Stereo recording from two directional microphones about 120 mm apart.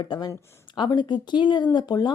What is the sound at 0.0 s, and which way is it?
Speech, 40° left (ahead or behind).